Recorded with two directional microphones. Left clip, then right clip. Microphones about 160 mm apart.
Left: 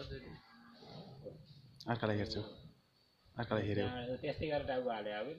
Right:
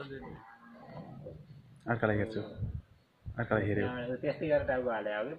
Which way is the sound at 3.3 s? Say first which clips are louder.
Right 6 dB; 25° left (ahead or behind).